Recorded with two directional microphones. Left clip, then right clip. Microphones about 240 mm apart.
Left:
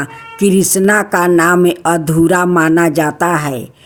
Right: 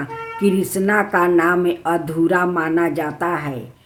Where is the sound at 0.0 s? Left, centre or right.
Left.